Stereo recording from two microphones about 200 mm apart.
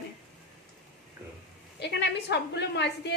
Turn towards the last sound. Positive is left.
turn(degrees=55)  # may be behind; listen again after turning